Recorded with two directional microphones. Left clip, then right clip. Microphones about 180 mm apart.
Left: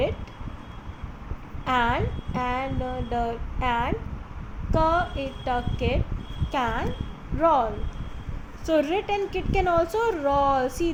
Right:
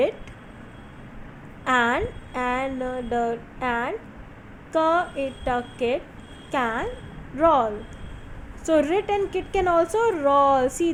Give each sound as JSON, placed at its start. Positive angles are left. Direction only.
{"t": 1.6, "sound": "a woman's voice", "side_deg": -30}